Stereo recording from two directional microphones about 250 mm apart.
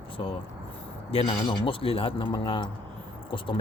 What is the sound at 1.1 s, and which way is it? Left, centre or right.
Speech, left.